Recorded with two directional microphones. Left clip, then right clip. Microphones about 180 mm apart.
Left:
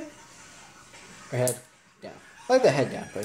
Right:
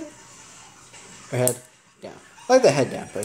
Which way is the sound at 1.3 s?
25° right (ahead or behind).